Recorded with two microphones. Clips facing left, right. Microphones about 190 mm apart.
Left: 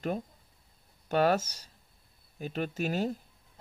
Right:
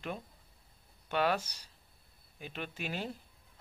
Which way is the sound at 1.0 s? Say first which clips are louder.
Left 5 dB; 40° left (ahead or behind).